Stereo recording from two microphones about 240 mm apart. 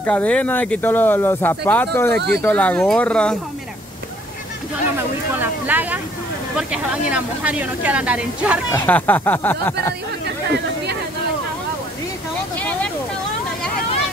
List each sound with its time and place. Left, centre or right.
0.0 s speech: centre
2.1 s speech: right
2.4 s a woman's voice: centre
4.9 s a woman's voice: centre
8.7 s speech: centre
12.5 s a sound: centre